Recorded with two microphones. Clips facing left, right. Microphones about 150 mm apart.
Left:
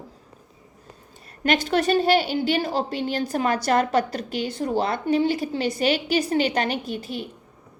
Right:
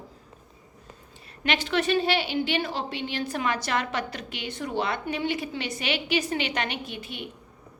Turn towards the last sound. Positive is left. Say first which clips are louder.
# left 7 dB
turn(degrees=35)  # may be behind; listen again after turning